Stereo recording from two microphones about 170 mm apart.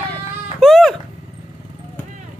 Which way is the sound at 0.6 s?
5° left (ahead or behind).